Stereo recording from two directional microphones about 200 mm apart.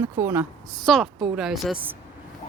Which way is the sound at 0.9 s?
Centre (ahead or behind).